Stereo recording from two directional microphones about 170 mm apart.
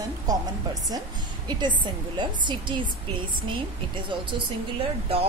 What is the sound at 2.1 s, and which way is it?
Speech, 25° right (ahead or behind).